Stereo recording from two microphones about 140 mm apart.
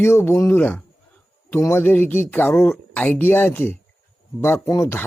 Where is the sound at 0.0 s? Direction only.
15° left (ahead or behind).